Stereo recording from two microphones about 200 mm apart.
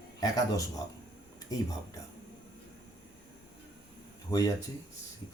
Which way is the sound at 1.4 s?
20° left (ahead or behind).